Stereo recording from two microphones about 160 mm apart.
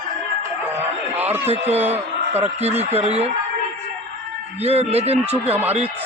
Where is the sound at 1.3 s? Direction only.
40° right (ahead or behind).